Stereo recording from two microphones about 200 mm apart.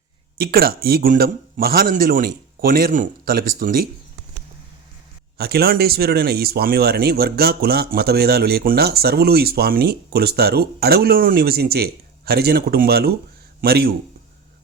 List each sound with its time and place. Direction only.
0.3 s speech: 50° right (ahead or behind)
5.4 s speech: 50° right (ahead or behind)